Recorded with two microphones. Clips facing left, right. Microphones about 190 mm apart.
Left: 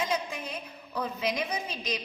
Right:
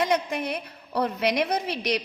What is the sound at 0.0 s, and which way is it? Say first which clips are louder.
A woman's voice: right 7 dB; 70° right (ahead or behind).